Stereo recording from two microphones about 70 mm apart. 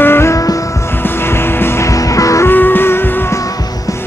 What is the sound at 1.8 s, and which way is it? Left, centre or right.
Music, left.